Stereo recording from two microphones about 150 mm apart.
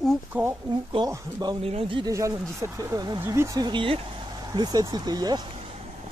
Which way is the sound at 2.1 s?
20° right (ahead or behind).